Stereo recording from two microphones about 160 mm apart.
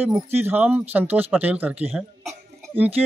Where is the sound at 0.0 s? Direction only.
15° right (ahead or behind).